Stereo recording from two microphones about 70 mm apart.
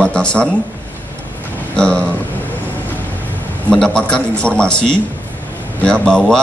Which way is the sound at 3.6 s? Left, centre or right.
Centre.